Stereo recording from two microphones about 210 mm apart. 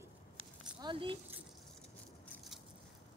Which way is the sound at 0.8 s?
25° right (ahead or behind).